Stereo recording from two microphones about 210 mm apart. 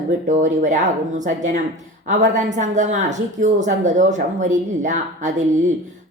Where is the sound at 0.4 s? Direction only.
35° right (ahead or behind).